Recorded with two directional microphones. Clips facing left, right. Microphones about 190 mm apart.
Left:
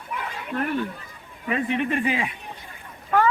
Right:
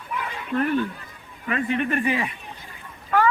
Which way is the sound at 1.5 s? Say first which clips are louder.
Even; 15° left (ahead or behind).